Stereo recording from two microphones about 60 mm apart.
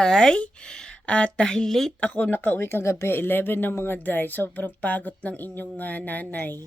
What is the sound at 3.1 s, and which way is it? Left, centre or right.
Speech, left.